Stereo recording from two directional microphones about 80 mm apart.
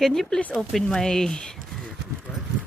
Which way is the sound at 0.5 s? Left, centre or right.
Centre.